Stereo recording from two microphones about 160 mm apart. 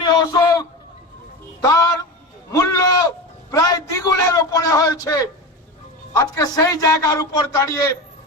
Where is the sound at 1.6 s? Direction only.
20° left (ahead or behind).